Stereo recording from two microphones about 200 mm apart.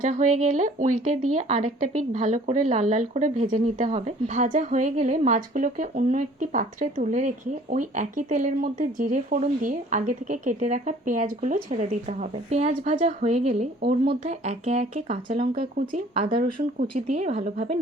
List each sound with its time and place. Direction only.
0.0 s speech: 40° right (ahead or behind)
13.8 s speech: 50° right (ahead or behind)
14.1 s speech: 35° right (ahead or behind)
17.1 s speech: 35° right (ahead or behind)